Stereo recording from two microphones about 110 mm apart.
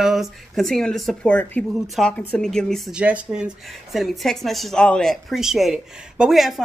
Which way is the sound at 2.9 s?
10° right (ahead or behind).